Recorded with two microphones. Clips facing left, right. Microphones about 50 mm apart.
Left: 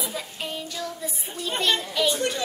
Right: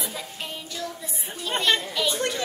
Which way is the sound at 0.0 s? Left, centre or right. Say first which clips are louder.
Left 2 dB; centre.